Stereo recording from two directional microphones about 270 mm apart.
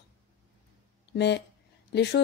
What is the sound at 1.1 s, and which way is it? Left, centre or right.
A woman's voice, left.